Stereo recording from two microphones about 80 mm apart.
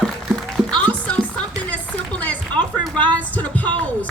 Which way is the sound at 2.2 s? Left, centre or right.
Centre.